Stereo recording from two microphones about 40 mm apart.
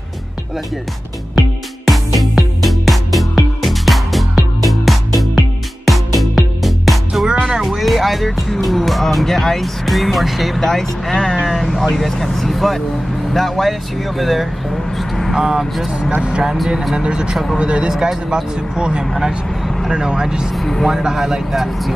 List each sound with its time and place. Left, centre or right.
1.9 s music: centre
7.6 s speech: centre
10.6 s speech: centre
15.0 s vehicle: centre
15.3 s speech: centre
16.9 s speech: right
17.3 s speech: centre
17.6 s speech: right
20.5 s speech: centre
20.9 s speech: centre